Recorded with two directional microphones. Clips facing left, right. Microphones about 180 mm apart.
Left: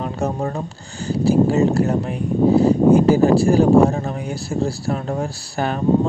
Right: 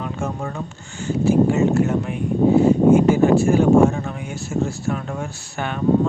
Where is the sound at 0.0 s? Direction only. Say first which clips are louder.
Left 4 dB; 35° left (ahead or behind).